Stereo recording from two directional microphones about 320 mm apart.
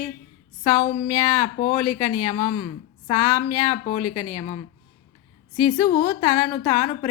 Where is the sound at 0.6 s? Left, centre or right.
Centre.